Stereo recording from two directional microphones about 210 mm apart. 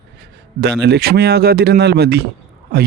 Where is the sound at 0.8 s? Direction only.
50° right (ahead or behind).